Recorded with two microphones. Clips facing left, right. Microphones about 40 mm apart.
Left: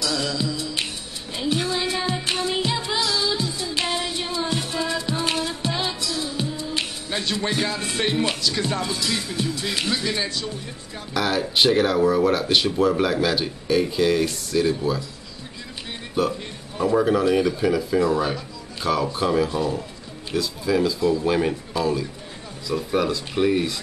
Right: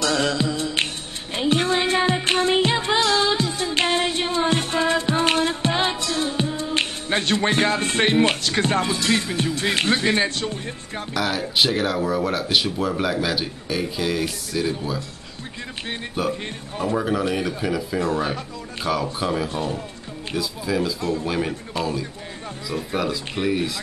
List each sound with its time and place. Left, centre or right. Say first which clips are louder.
0.0 s music: right 4 dB; right
9.6 s speech: right 4 dB; right
11.1 s speech: left 1 dB; centre
16.2 s speech: left 2 dB; centre
16.9 s speech: left 4 dB; centre
19.1 s speech: left 3 dB; centre
19.5 s speech: left 2 dB; right
20.3 s speech: left 2 dB; centre
22.7 s speech: left 3 dB; centre